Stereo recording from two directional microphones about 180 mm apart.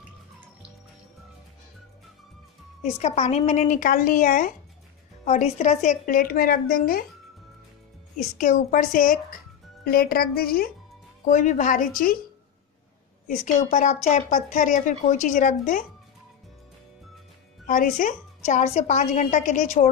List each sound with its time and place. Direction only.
2.8 s speech: 40° left (ahead or behind)
8.4 s a woman's voice: 45° left (ahead or behind)
11.2 s speech: 45° left (ahead or behind)
13.3 s speech: 40° left (ahead or behind)
17.6 s a woman's voice: 50° left (ahead or behind)